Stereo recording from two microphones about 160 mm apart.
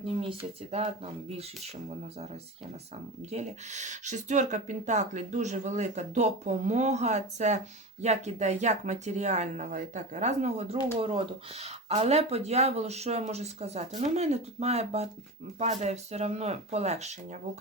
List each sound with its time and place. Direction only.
0.0 s speech: 35° right (ahead or behind)
3.3 s speech: 45° right (ahead or behind)